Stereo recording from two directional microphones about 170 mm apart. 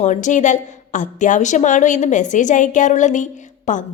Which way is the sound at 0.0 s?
45° left (ahead or behind).